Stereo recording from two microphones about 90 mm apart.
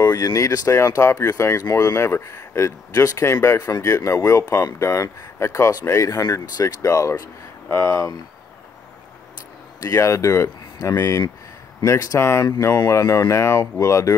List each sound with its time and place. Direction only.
0.0 s speech: 40° left (ahead or behind)
7.6 s speech: 25° left (ahead or behind)
7.9 s speech: 40° left (ahead or behind)
9.8 s speech: 35° left (ahead or behind)